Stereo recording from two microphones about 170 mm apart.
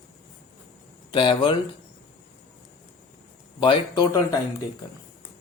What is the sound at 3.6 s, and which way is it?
Speech, 25° left (ahead or behind).